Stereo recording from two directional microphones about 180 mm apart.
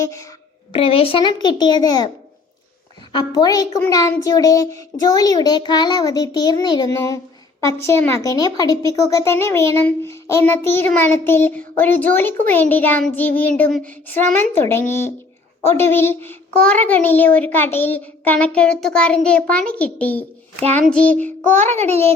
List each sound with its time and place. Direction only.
0.0 s a child's voice: 15° left (ahead or behind)
0.7 s a child's voice: 30° left (ahead or behind)
3.1 s a child's voice: 25° left (ahead or behind)
20.8 s child singing: 5° left (ahead or behind)
21.6 s a child's voice: 40° right (ahead or behind)
21.8 s a child's voice: 15° left (ahead or behind)